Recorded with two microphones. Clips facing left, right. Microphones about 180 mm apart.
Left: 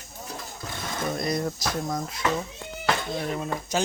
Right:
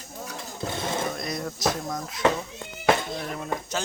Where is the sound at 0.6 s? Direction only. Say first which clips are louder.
Right 9 dB; 25° right (ahead or behind).